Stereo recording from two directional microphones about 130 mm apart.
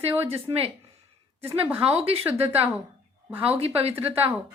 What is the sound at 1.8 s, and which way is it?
Speech, 50° right (ahead or behind).